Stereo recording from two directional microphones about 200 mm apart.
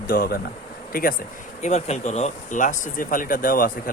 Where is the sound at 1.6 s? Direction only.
35° left (ahead or behind).